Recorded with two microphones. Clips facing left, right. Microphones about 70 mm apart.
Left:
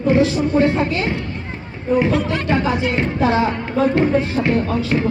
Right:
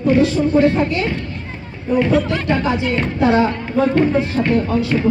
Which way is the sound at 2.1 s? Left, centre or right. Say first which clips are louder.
Right 2 dB; centre.